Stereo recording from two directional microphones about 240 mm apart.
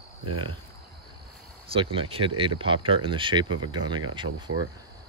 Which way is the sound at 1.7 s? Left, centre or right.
Right.